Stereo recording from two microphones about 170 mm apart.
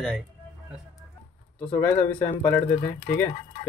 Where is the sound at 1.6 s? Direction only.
10° left (ahead or behind).